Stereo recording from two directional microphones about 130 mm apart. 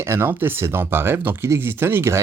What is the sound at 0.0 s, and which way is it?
Speech, 20° right (ahead or behind).